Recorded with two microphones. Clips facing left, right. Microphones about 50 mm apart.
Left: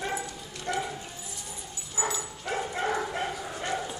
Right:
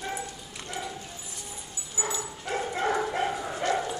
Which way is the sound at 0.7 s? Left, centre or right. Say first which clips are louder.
Left 7 dB; left.